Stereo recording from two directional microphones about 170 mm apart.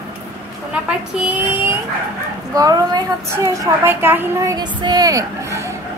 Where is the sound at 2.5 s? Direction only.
20° right (ahead or behind).